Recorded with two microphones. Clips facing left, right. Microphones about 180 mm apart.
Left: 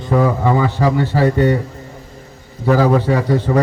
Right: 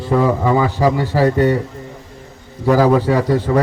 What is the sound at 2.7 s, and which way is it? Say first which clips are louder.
Speech: right 1 dB; 10° right (ahead or behind).